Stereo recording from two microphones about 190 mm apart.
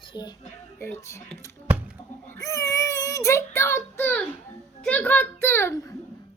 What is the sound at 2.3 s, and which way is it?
Child singing, 15° left (ahead or behind).